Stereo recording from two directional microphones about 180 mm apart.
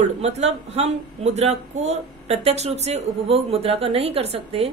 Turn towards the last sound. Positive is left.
turn(degrees=-35)  # may be behind; listen again after turning